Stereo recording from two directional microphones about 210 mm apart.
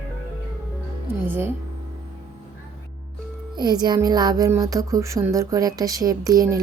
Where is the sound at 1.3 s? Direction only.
10° right (ahead or behind).